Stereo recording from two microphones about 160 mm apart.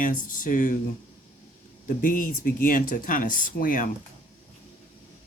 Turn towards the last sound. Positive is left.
turn(degrees=55)  # may be behind; listen again after turning